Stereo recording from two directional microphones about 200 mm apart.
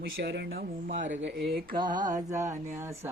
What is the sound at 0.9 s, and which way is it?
Speech, 40° right (ahead or behind).